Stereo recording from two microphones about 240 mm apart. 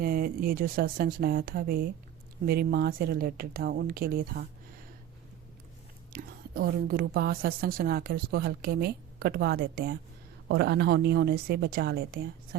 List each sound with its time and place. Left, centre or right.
0.0 s a woman's voice: right
6.1 s a woman's voice: right